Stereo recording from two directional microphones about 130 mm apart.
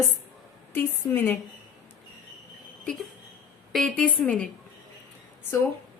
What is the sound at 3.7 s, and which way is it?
Speech, 5° left (ahead or behind).